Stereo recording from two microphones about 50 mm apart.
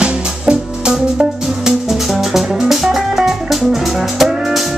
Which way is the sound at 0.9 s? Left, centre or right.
Centre.